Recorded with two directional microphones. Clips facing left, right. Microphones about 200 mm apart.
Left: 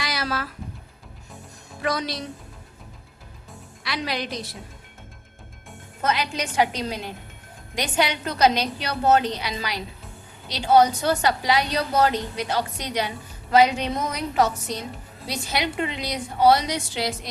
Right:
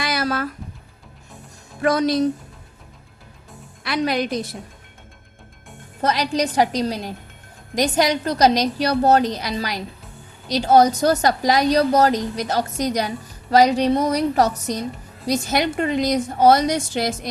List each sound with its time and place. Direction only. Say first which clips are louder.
0.0 s a sound: right 5 dB; 50° right (ahead or behind)
1.8 s a woman's voice: right 9 dB; 50° right (ahead or behind)
3.8 s a woman's voice: right 7 dB; 50° right (ahead or behind)
6.0 s a woman's voice: right 5 dB; 35° right (ahead or behind)